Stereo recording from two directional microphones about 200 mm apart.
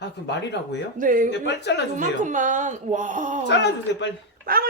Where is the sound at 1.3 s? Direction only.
60° left (ahead or behind).